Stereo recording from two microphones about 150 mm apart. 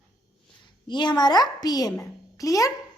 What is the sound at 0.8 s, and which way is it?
A child's voice, 30° left (ahead or behind).